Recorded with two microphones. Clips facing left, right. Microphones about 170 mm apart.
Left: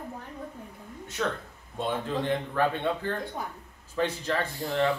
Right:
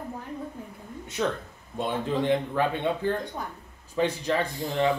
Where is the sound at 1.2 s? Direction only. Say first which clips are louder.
Right 3 dB; 15° right (ahead or behind).